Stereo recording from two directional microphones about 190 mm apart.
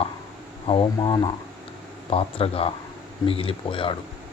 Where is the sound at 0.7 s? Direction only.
25° left (ahead or behind).